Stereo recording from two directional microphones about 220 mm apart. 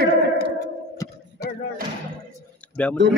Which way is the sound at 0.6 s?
15° left (ahead or behind).